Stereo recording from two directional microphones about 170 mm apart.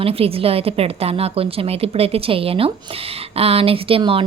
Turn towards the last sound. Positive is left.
turn(degrees=-35)  # may be behind; listen again after turning